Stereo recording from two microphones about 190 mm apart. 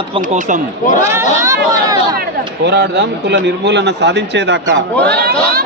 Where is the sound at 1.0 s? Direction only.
15° right (ahead or behind).